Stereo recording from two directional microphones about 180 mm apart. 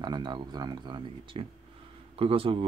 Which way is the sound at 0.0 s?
25° right (ahead or behind).